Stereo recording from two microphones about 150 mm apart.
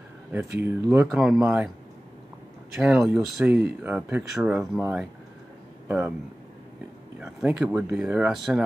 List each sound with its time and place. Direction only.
0.6 s speech: 15° right (ahead or behind)
1.0 s speech: centre (ahead or behind)
2.8 s speech: 5° right (ahead or behind)
5.9 s speech: 15° right (ahead or behind)
7.2 s speech: 5° right (ahead or behind)